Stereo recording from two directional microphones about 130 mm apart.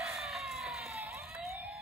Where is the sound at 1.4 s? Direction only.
5° right (ahead or behind).